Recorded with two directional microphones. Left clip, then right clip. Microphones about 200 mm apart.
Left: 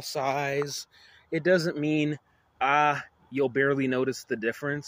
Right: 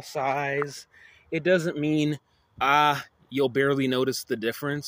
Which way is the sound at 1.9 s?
20° right (ahead or behind).